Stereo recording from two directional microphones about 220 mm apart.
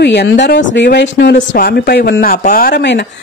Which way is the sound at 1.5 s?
45° left (ahead or behind).